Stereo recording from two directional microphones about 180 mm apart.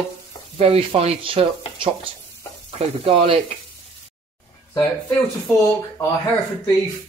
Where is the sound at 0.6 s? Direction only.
35° right (ahead or behind).